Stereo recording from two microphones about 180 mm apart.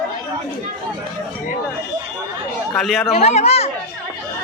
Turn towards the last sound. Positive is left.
turn(degrees=35)  # may be behind; listen again after turning